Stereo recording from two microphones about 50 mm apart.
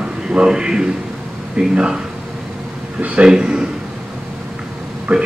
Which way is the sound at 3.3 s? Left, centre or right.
Centre.